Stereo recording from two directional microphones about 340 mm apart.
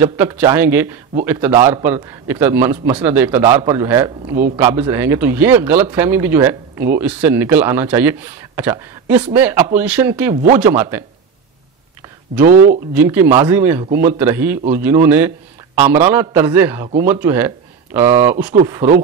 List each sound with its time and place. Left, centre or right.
0.0 s a man's voice: centre
12.4 s speech: right
12.9 s a man's voice: centre